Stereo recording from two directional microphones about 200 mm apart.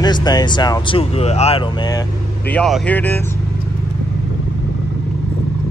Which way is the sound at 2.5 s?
5° left (ahead or behind).